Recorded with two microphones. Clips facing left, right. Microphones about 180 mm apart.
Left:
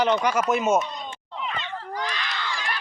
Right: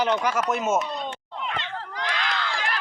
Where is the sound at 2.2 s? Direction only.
60° right (ahead or behind).